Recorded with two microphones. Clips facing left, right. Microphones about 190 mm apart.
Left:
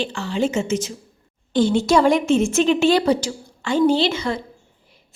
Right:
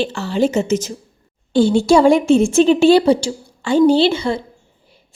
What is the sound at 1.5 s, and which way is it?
A woman's voice, 30° right (ahead or behind).